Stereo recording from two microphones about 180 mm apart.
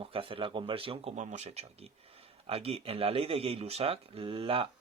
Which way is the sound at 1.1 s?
40° right (ahead or behind).